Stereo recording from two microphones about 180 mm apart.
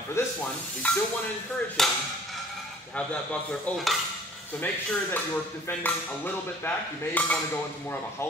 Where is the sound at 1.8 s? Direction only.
Centre (ahead or behind).